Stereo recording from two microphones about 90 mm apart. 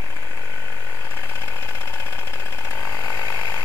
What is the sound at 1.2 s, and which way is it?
Vehicle, 30° left (ahead or behind).